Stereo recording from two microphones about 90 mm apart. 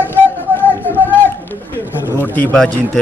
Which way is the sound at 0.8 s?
20° right (ahead or behind).